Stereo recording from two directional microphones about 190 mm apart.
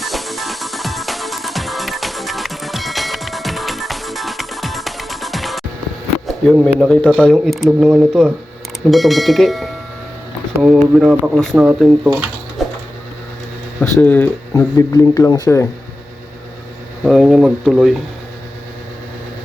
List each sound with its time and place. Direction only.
0.0 s music: centre (ahead or behind)
6.2 s speech: centre (ahead or behind)
12.6 s printer: centre (ahead or behind)
14.0 s speech: 10° left (ahead or behind)
17.0 s speech: centre (ahead or behind)